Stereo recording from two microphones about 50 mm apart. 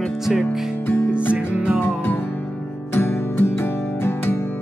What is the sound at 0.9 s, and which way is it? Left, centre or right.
Music, left.